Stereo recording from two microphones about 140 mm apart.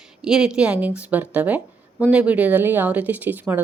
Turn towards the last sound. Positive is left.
turn(degrees=-15)  # may be behind; listen again after turning